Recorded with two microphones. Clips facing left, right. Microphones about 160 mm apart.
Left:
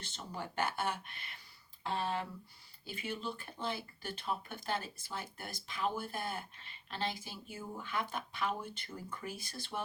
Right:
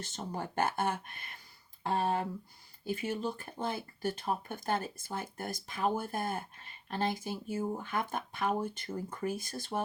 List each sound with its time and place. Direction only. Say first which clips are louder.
0.0 s speech: right 5 dB; 45° right (ahead or behind)